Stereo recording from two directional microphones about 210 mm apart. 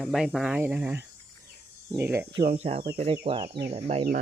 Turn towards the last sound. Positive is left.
turn(degrees=-30)  # may be behind; listen again after turning